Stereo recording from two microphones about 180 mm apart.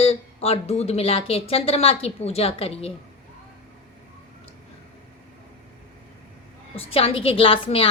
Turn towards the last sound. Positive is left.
turn(degrees=30)  # may be behind; listen again after turning